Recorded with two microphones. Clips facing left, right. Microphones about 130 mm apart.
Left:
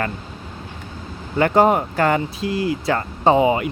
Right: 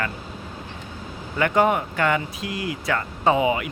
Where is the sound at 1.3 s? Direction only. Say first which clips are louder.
Left 4 dB; 35° left (ahead or behind).